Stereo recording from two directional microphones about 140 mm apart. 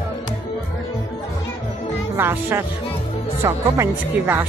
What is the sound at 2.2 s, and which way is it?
Speech, 15° right (ahead or behind).